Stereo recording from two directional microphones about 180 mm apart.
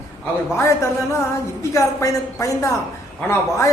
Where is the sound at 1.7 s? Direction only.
15° left (ahead or behind).